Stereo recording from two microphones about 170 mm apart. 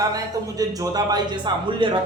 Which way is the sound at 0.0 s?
20° right (ahead or behind).